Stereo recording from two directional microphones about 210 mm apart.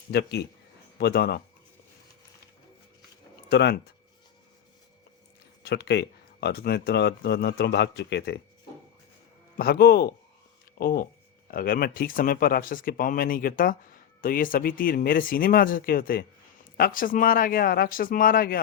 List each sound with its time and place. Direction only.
0.1 s speech: 50° left (ahead or behind)
3.5 s speech: 50° left (ahead or behind)
5.6 s speech: 50° left (ahead or behind)
9.6 s speech: 45° left (ahead or behind)